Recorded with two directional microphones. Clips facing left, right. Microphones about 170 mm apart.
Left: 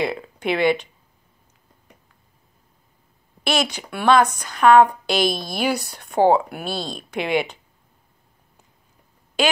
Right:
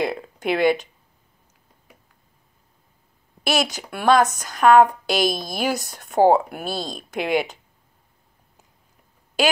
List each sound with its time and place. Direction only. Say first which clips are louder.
0.0 s a woman's voice: even; 45° right (ahead or behind)
3.4 s a woman's voice: even; 45° right (ahead or behind)